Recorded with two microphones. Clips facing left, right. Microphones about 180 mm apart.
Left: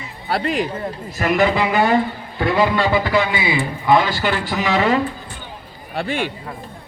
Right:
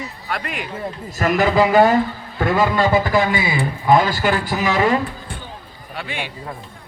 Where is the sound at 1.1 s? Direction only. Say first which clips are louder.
Right 1 dB; 40° right (ahead or behind).